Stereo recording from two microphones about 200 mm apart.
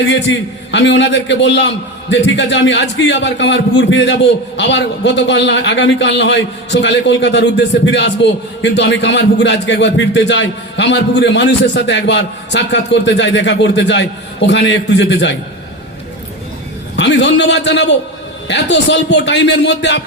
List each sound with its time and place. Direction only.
0.0 s a man's voice: 65° left (ahead or behind)
17.0 s a man's voice: 60° left (ahead or behind)